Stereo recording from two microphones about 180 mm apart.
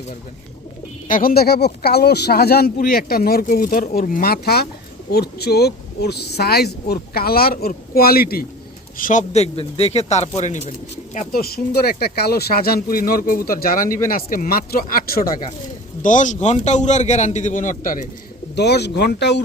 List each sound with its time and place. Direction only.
1.0 s speech: 50° left (ahead or behind)
9.0 s a man's voice: 45° left (ahead or behind)
11.1 s speech: 50° left (ahead or behind)
16.0 s a man's voice: 45° left (ahead or behind)
18.5 s speech: 70° left (ahead or behind)